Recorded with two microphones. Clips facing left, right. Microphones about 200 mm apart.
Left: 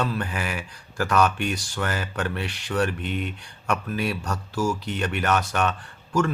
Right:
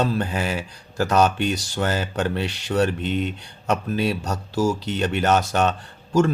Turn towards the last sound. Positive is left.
turn(degrees=-25)  # may be behind; listen again after turning